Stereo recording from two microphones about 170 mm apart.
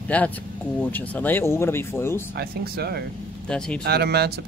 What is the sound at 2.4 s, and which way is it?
Speech, 65° right (ahead or behind).